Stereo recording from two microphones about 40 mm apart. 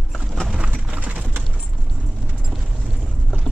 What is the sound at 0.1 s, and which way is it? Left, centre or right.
Clip-clop, centre.